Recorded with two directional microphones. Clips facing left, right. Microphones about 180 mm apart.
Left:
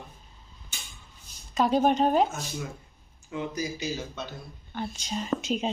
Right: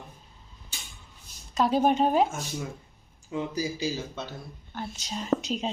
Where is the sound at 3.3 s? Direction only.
30° right (ahead or behind).